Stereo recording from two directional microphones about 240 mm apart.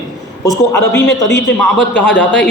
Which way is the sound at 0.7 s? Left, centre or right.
Centre.